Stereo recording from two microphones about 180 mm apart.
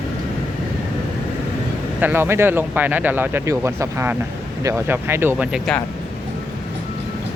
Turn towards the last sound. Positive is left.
turn(degrees=-10)  # may be behind; listen again after turning